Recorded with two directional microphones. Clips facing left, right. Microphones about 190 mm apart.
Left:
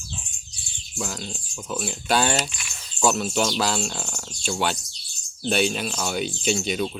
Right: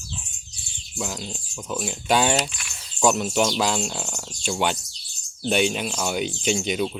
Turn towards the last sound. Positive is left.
turn(degrees=-15)  # may be behind; listen again after turning